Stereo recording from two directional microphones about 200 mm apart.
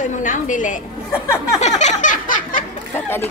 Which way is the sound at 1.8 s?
35° left (ahead or behind).